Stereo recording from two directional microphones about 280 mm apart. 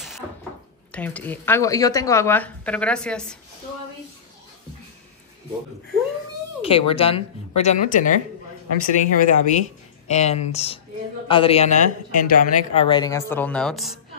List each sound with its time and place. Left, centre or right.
0.9 s speech: centre
6.6 s speech: centre